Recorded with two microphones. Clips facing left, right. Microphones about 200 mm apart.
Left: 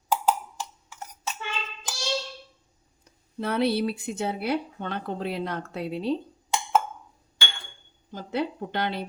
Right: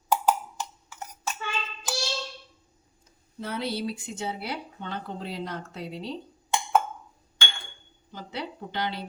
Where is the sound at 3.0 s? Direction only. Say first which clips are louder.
Left 6 dB; 65° left (ahead or behind).